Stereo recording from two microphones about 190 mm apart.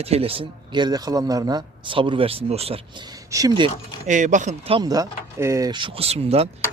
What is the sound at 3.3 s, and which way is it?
Speech, 20° right (ahead or behind).